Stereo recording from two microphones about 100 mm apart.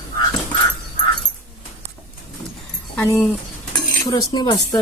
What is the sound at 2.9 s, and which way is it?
Speech, 20° left (ahead or behind).